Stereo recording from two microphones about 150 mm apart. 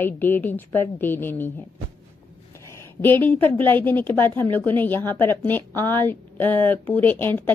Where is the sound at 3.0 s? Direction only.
15° left (ahead or behind).